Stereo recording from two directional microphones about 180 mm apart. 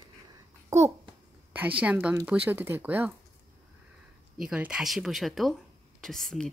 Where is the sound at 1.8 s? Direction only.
5° right (ahead or behind).